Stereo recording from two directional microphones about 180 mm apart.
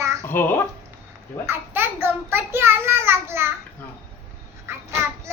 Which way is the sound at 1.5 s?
15° right (ahead or behind).